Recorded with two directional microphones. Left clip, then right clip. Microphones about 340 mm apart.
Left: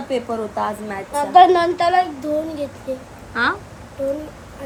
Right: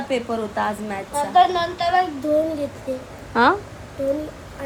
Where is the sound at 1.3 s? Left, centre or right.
Left.